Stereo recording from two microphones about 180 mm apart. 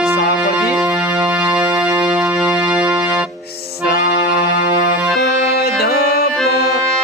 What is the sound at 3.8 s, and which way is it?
Music, 60° left (ahead or behind).